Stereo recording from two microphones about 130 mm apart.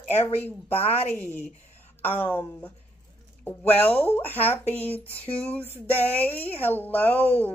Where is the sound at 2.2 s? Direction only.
15° left (ahead or behind).